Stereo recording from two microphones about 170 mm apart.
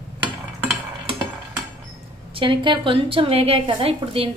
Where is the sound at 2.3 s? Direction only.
30° right (ahead or behind).